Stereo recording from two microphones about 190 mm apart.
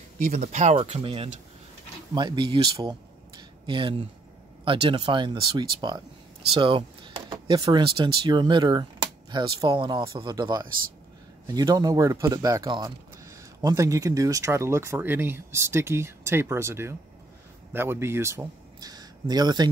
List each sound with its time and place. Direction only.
0.4 s speech: 40° right (ahead or behind); by 19.7 s 20° right (ahead or behind)